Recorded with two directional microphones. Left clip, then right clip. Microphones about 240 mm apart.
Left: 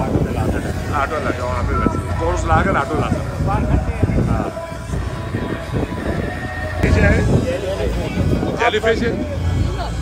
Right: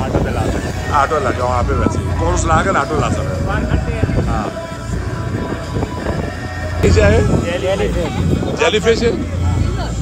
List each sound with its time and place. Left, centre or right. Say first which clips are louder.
0.9 s speech: right 6 dB; centre
6.9 s speech: right 5 dB; centre
8.5 s speech: right 3 dB; centre